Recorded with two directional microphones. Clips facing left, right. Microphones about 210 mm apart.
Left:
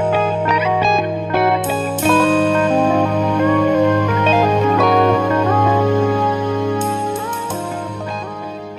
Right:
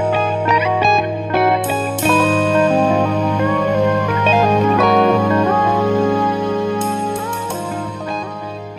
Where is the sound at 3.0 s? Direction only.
10° left (ahead or behind).